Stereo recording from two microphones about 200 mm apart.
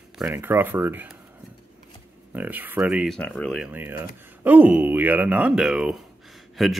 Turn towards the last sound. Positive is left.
turn(degrees=0)  # may be behind; listen again after turning